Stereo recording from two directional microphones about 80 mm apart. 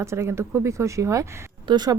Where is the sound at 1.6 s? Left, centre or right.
Right.